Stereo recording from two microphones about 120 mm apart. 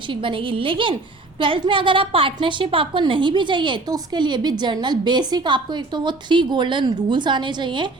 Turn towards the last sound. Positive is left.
turn(degrees=-40)  # may be behind; listen again after turning